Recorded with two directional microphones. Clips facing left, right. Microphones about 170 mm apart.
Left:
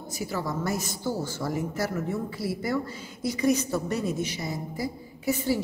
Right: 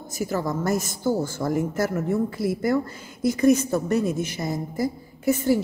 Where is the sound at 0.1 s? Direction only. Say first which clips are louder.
Right 5 dB; 45° right (ahead or behind).